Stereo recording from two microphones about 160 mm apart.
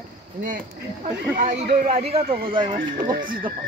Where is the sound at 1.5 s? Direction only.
65° right (ahead or behind).